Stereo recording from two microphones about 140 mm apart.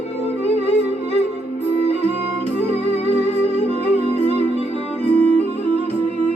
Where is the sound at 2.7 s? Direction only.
50° left (ahead or behind).